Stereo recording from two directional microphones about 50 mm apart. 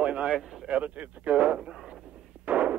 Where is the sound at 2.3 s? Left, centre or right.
Right.